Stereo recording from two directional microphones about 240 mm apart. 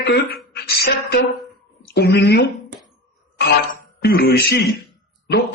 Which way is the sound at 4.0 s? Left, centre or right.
Left.